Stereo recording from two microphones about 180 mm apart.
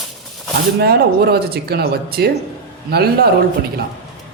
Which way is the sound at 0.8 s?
60° right (ahead or behind).